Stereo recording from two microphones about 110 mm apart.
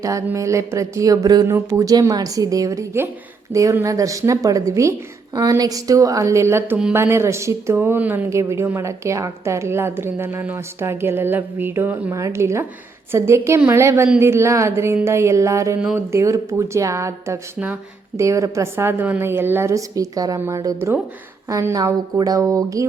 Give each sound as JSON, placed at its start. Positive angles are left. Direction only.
{"t": 0.0, "sound": "a woman's voice", "side_deg": -30}